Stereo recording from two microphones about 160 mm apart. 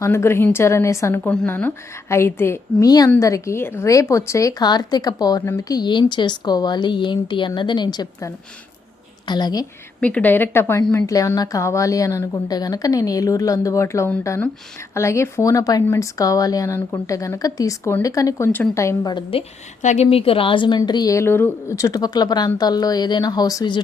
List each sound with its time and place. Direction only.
0.0 s a woman's voice: 15° left (ahead or behind)
10.0 s a woman's voice: 10° left (ahead or behind); by 19.5 s 30° left (ahead or behind)
19.8 s a woman's voice: 45° left (ahead or behind); by 23.8 s 25° left (ahead or behind)